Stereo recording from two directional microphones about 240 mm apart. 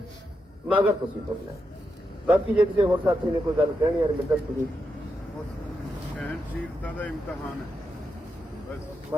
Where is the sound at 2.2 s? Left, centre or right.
Centre.